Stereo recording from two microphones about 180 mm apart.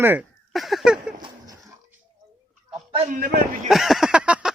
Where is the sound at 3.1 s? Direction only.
60° right (ahead or behind).